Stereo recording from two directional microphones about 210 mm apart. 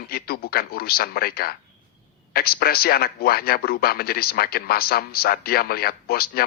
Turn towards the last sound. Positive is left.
turn(degrees=45)  # may be behind; listen again after turning